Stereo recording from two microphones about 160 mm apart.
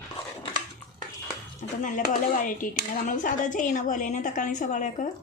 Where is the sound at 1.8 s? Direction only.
55° left (ahead or behind).